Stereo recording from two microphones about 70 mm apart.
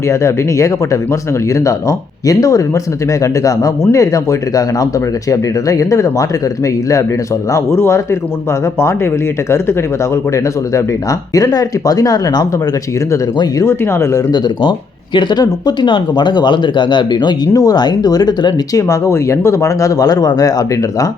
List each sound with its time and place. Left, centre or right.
0.1 s speech: left
3.9 s speech: left
7.5 s speech: left
11.3 s speech: left
13.7 s speech: left
15.3 s speech: left
17.5 s speech: left
18.8 s speech: left